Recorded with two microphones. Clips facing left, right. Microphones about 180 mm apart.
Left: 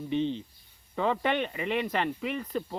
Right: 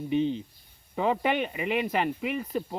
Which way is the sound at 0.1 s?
10° right (ahead or behind).